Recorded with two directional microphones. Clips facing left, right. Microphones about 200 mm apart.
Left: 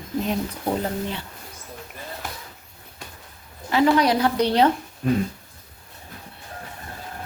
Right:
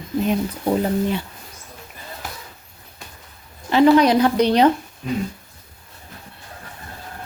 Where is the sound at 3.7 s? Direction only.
20° right (ahead or behind).